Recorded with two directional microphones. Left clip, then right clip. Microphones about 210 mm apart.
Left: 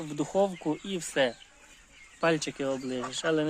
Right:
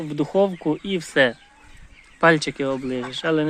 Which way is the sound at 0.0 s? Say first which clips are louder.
Right 7 dB; 10° right (ahead or behind).